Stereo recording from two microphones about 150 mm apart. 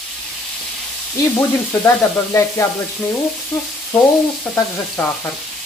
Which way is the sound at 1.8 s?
15° left (ahead or behind).